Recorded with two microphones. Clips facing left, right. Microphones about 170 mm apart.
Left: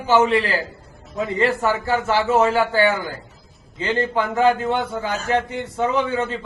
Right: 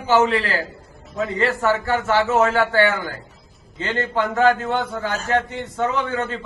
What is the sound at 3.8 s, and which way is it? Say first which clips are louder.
A man's voice: left 1 dB; 10° left (ahead or behind).